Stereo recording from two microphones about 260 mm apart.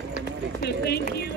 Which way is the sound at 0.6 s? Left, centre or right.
Left.